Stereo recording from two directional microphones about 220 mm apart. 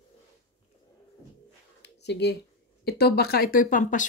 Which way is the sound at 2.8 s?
45° left (ahead or behind).